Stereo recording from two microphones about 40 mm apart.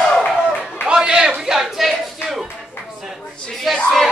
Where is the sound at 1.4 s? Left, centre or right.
Centre.